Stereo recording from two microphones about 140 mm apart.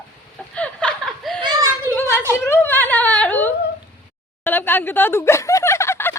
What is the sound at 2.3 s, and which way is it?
A woman's voice, 20° left (ahead or behind).